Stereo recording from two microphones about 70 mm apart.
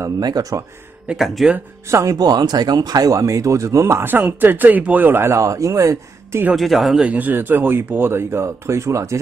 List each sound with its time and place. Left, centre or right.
0.2 s speech: right
1.1 s speech: centre
1.9 s speech: right
2.1 s speech: right
4.0 s speech: right
6.5 s speech: centre
7.0 s speech: right